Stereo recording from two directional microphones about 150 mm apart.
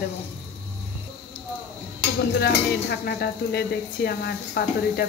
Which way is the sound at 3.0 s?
90° left.